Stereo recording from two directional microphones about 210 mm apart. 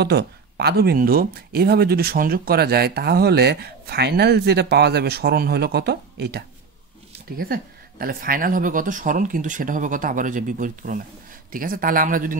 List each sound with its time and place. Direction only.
0.0 s speech: 50° right (ahead or behind)